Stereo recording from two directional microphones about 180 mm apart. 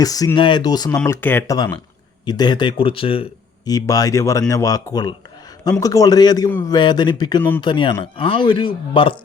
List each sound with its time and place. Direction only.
0.0 s speech: 20° left (ahead or behind)
3.7 s speech: 20° left (ahead or behind)